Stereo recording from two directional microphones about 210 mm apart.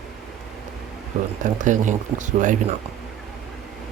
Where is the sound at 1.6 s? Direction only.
35° right (ahead or behind).